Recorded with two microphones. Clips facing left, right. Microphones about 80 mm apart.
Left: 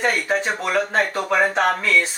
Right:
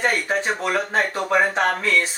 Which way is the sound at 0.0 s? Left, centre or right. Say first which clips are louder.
Left 1 dB; centre.